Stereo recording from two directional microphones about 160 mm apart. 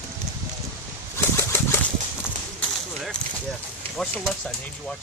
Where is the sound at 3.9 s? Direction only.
Centre (ahead or behind).